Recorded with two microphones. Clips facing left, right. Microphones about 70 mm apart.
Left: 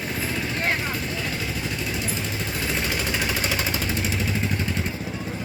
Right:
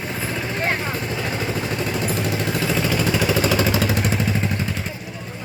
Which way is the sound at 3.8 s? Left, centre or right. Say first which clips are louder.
Right 6 dB; right.